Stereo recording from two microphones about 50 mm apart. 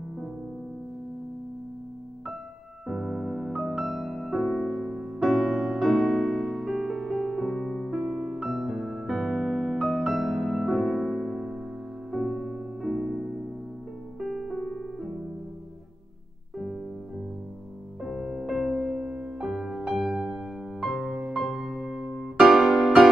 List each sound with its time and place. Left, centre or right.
2.9 s music: centre
8.0 s music: centre
14.2 s piano: centre
14.5 s piano: centre
18.0 s music: centre
18.9 s music: right
19.4 s music: centre